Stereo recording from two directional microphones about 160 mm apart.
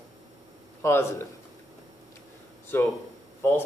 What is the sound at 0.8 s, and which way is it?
Speech, 15° left (ahead or behind).